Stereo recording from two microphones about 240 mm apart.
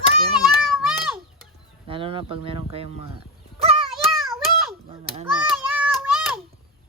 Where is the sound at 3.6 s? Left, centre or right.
Right.